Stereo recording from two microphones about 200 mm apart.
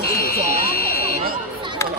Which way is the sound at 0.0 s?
50° left (ahead or behind).